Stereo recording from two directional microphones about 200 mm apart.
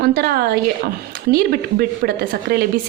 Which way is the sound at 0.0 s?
50° right (ahead or behind).